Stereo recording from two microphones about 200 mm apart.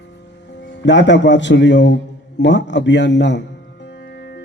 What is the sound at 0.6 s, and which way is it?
A man's voice, 60° left (ahead or behind).